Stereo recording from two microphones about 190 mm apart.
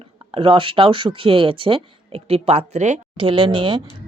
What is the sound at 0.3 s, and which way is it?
Speech, 25° right (ahead or behind).